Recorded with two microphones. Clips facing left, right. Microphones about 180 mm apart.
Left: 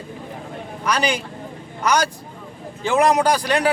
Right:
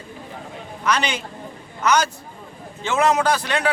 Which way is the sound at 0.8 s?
10° left (ahead or behind).